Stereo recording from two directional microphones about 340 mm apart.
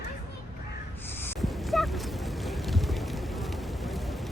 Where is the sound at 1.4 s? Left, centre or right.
Centre.